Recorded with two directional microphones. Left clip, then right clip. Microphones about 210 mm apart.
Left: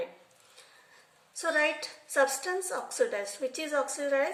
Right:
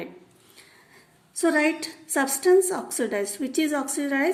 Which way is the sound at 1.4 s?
45° right (ahead or behind).